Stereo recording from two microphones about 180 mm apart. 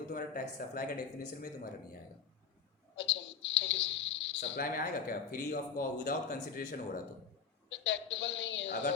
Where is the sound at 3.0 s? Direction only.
85° left.